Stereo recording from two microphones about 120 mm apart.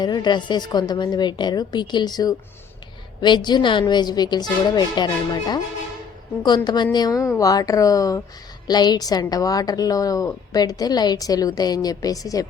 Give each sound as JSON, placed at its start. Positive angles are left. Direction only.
{"t": 0.0, "sound": "a woman's voice", "side_deg": 35}